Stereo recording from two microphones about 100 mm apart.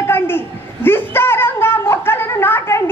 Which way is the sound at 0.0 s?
25° left (ahead or behind).